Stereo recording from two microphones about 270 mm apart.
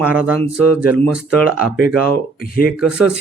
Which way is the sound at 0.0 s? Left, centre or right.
Centre.